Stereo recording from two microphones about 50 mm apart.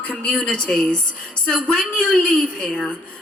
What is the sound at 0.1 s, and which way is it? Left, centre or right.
A woman's voice, left.